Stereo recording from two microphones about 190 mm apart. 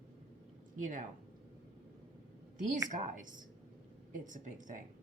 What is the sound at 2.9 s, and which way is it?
A woman's voice, 45° right (ahead or behind).